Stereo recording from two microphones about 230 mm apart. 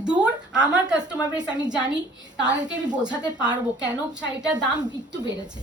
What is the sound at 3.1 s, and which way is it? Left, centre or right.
Speech, centre.